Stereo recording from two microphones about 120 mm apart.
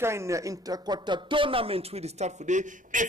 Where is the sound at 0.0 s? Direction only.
25° right (ahead or behind).